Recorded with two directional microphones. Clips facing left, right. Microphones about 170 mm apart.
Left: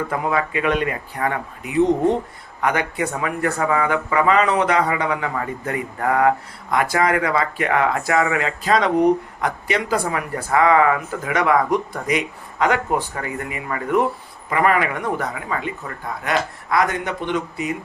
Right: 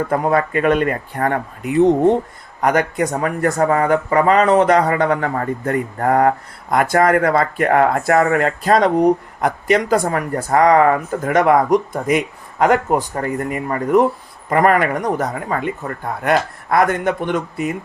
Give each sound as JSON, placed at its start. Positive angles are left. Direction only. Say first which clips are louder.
{"t": 0.1, "sound": "speech", "louder": "right 5 dB", "side_deg": -45}